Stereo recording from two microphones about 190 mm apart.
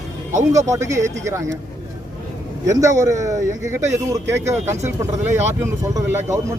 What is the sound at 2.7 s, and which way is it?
Speech, 15° right (ahead or behind).